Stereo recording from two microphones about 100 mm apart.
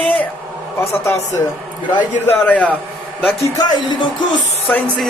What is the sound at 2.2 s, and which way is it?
Speech, 15° left (ahead or behind).